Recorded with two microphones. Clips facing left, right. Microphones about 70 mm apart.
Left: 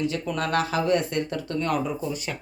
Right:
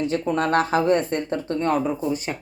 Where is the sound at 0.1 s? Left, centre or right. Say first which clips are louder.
Right 5 dB; right.